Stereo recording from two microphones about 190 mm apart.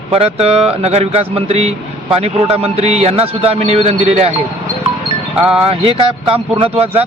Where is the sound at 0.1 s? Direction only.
30° right (ahead or behind).